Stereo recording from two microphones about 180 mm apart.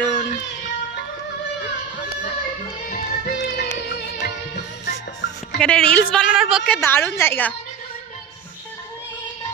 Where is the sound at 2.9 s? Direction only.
50° left (ahead or behind).